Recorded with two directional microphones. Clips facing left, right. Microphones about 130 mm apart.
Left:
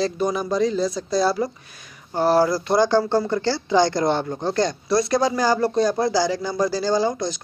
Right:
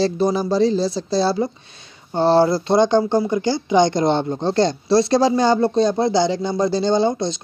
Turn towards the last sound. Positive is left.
turn(degrees=-25)  # may be behind; listen again after turning